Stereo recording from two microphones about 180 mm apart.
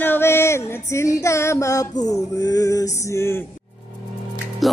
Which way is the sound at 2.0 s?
20° left (ahead or behind).